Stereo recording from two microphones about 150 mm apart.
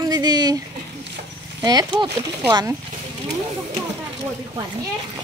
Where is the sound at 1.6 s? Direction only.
25° right (ahead or behind).